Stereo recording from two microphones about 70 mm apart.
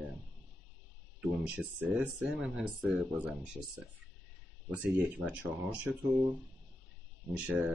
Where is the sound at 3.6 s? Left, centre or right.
Centre.